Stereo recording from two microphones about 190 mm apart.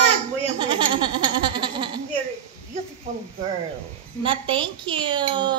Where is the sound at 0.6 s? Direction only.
25° right (ahead or behind).